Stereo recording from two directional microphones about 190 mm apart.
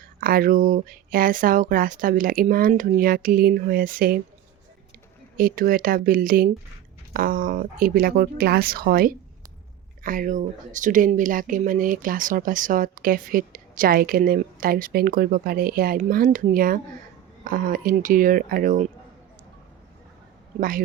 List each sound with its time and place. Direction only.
0.2 s speech: 50° right (ahead or behind)
5.4 s speech: 50° right (ahead or behind)
20.6 s speech: 45° right (ahead or behind)